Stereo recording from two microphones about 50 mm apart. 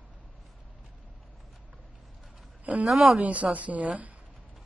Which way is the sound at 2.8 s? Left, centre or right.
Centre.